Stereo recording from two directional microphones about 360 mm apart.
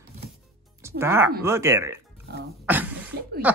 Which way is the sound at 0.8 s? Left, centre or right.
Centre.